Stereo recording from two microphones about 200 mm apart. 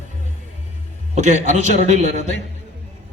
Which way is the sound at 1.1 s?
35° right (ahead or behind).